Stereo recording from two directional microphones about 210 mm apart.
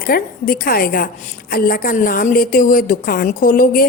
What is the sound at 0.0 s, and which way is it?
A woman's voice, 45° left (ahead or behind).